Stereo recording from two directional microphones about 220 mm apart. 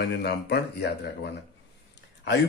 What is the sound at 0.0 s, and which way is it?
Speech, 50° left (ahead or behind).